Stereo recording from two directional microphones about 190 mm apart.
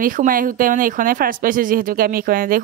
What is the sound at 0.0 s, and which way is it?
Speech, 45° right (ahead or behind).